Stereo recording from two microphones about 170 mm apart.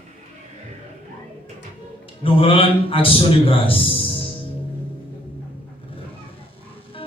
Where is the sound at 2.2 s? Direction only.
35° left (ahead or behind).